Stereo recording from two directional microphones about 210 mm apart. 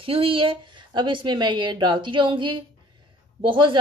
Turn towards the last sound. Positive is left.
turn(degrees=-25)  # may be behind; listen again after turning